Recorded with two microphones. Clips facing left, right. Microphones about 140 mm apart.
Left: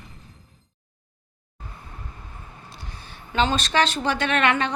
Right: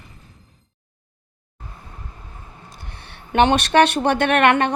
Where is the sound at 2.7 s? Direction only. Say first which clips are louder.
Right 1 dB; 60° right (ahead or behind).